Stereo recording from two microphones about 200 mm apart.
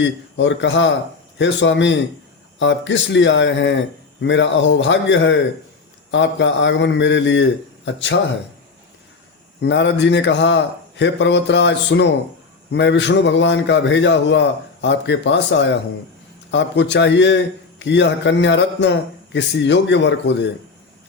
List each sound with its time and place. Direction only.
0.3 s a man's voice: 65° left (ahead or behind)
9.6 s a man's voice: 65° left (ahead or behind)